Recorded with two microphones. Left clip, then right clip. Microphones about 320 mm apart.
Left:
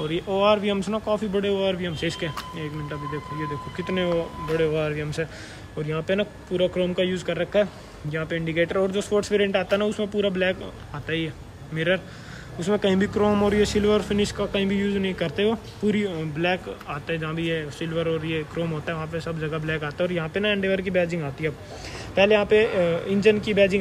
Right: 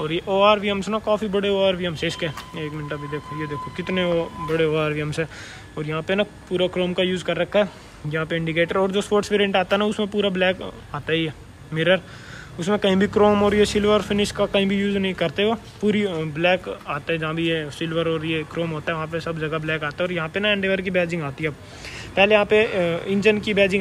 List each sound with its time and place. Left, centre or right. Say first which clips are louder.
0.0 s speech: right 4 dB; centre